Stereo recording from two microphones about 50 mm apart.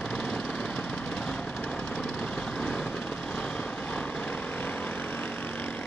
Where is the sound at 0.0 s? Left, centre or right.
Centre.